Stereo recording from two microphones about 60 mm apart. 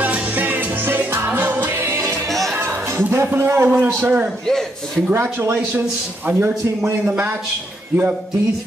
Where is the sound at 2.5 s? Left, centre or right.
Right.